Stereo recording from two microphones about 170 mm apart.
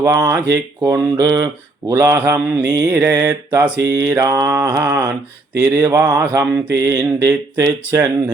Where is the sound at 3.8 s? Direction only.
85° right.